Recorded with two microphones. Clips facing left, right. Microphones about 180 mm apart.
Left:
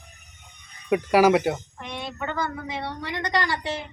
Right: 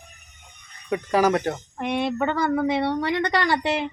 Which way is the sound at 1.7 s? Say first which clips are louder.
Right 10 dB; 60° right (ahead or behind).